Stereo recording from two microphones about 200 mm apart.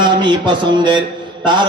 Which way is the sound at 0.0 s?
25° right (ahead or behind).